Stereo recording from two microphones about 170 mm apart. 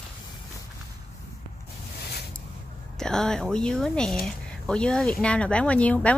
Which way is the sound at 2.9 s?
5° left (ahead or behind).